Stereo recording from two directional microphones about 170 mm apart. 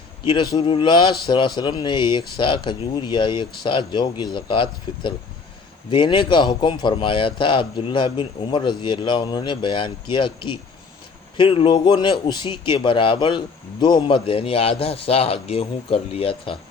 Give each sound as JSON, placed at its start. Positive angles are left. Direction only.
{"t": 0.3, "sound": "a man's voice", "side_deg": 25}